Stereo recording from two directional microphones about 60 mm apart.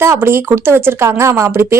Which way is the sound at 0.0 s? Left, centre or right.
Right.